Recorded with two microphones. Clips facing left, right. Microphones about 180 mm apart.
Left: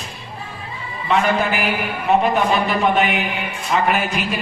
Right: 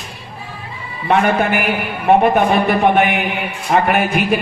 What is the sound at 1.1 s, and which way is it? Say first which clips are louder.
A man's voice: right 3 dB; 55° right (ahead or behind).